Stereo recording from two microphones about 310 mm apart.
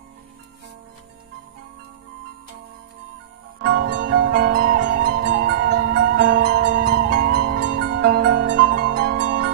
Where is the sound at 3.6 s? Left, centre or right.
Right.